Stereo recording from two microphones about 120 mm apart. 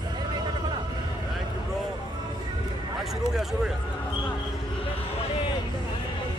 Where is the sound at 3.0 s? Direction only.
5° right (ahead or behind).